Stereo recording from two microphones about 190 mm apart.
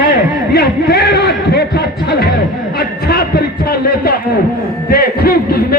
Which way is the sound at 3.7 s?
55° left (ahead or behind).